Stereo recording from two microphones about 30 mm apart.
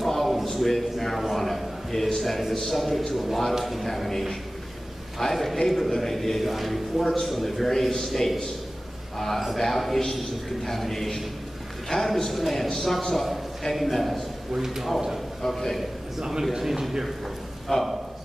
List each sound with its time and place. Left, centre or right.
0.0 s a sound: centre
0.7 s a man's voice: centre
1.3 s a sound: centre
2.7 s a man's voice: centre
5.2 s a man's voice: centre
6.4 s a man's voice: centre
7.0 s a man's voice: centre
9.6 s a man's voice: centre
14.5 s a man's voice: centre
15.4 s a man's voice: centre
16.2 s a man's voice: centre
17.7 s a man's voice: centre